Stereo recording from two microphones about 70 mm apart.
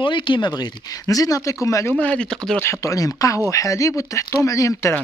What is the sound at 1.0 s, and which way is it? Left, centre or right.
Speech, left.